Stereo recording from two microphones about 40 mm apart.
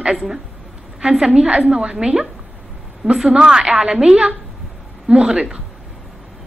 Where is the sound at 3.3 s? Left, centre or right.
Right.